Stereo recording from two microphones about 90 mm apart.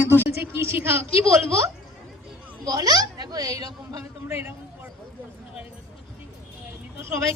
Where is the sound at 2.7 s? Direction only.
40° right (ahead or behind).